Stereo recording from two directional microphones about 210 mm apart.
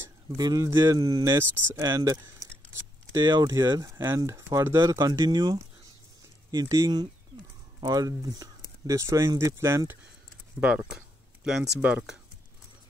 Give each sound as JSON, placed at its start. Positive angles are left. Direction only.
{"t": 0.4, "sound": "speech", "side_deg": -15}